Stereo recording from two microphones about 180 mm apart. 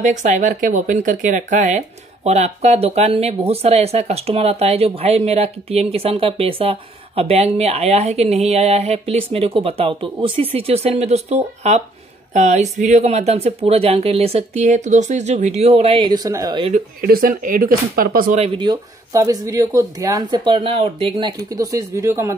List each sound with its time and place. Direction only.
0.0 s speech: 40° right (ahead or behind); by 16.7 s 25° right (ahead or behind)
16.7 s speech: 55° right (ahead or behind)
18.4 s speech: 25° right (ahead or behind)